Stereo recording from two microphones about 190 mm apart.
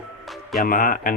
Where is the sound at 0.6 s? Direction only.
50° left (ahead or behind).